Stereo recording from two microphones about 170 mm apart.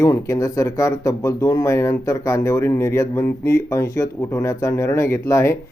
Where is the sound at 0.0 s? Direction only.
20° left (ahead or behind).